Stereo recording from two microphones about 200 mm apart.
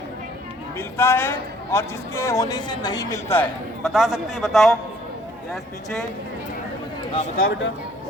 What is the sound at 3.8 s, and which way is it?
A man's voice, centre (ahead or behind).